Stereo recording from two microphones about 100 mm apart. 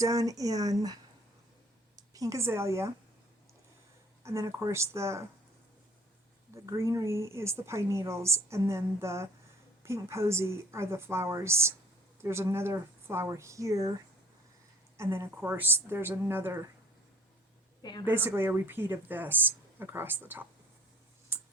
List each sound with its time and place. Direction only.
0.0 s speech: 35° right (ahead or behind)
2.0 s a woman's voice: 35° right (ahead or behind)
4.2 s speech: 30° right (ahead or behind)
6.5 s speech: 30° right (ahead or behind)
14.9 s speech: 30° right (ahead or behind)
18.0 s speech: 20° right (ahead or behind)
21.3 s a sound: 20° right (ahead or behind)